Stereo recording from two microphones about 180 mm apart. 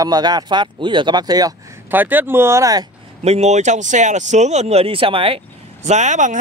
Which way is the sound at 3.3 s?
40° right (ahead or behind).